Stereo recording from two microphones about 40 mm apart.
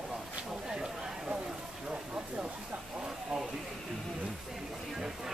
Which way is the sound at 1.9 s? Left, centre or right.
Right.